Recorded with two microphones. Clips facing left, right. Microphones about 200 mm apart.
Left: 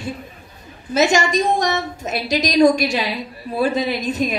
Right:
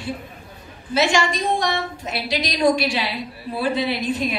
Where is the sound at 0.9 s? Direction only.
45° left (ahead or behind).